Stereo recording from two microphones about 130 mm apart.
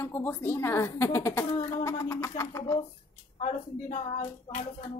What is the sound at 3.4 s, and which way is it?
Speech, 60° left (ahead or behind).